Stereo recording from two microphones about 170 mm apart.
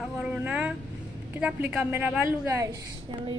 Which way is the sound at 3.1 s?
30° right (ahead or behind).